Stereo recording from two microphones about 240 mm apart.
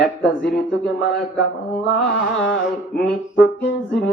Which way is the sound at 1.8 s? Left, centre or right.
Left.